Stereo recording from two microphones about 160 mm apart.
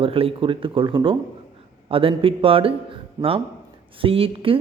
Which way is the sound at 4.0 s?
35° right (ahead or behind).